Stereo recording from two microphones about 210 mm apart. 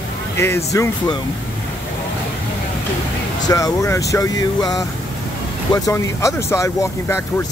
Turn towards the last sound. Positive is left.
turn(degrees=15)  # may be behind; listen again after turning